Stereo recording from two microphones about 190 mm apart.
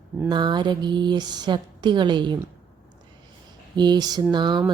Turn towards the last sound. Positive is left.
turn(degrees=-25)  # may be behind; listen again after turning